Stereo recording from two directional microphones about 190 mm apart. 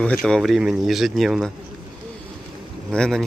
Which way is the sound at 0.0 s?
5° left (ahead or behind).